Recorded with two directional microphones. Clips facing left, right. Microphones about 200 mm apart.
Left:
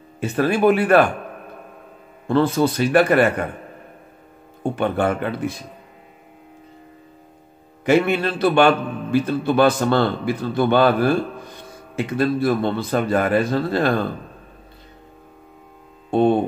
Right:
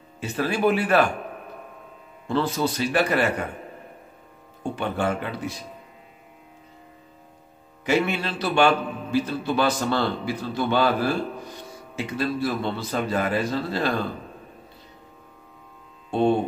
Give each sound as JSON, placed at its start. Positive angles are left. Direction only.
{"t": 0.2, "sound": "a man's voice", "side_deg": 55}
{"t": 2.2, "sound": "a man's voice", "side_deg": 55}
{"t": 4.7, "sound": "a man's voice", "side_deg": 55}
{"t": 7.8, "sound": "a man's voice", "side_deg": 55}